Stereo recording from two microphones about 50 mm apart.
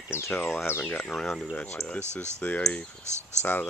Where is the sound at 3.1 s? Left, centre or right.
Right.